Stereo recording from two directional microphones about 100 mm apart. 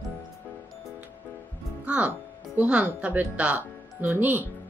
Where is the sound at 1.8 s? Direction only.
10° right (ahead or behind).